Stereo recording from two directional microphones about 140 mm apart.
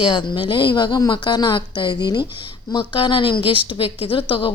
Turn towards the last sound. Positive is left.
turn(degrees=35)  # may be behind; listen again after turning